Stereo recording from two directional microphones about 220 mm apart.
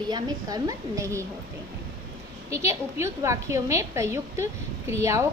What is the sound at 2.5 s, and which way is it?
A woman's voice, 10° right (ahead or behind).